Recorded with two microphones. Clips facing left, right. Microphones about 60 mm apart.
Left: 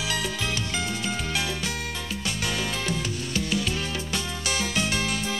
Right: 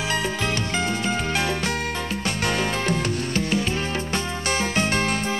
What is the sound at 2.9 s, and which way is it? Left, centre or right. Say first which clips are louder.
Music: right 5 dB; right.